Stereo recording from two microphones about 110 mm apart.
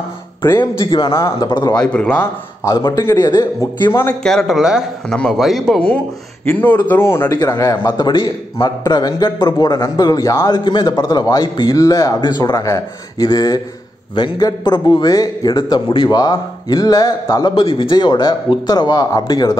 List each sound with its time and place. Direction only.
0.6 s a man's voice: 45° left (ahead or behind)
1.8 s speech: 10° left (ahead or behind)
2.6 s a man's voice: 30° left (ahead or behind)
3.3 s a man's voice: 40° left (ahead or behind)
4.2 s speech: 5° left (ahead or behind)
6.5 s a man's voice: 15° left (ahead or behind); by 10.5 s 30° left (ahead or behind)
10.5 s a man's voice: 45° left (ahead or behind)
17.6 s a man's voice: 50° left (ahead or behind); by 19.5 s 35° left (ahead or behind)